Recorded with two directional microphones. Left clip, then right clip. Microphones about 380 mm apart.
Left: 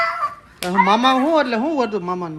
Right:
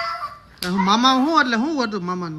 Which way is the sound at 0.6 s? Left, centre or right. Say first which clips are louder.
Left 3 dB; centre.